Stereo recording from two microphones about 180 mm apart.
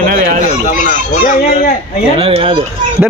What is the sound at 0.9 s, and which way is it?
Speech, 45° left (ahead or behind).